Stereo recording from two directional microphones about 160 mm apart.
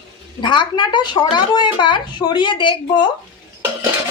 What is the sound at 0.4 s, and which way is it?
A child's voice, 30° left (ahead or behind).